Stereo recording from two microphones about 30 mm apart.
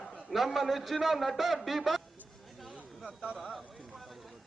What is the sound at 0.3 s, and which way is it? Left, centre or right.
A man's voice, centre.